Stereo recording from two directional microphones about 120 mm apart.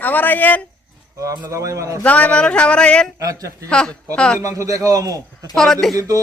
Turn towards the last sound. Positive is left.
turn(degrees=-30)  # may be behind; listen again after turning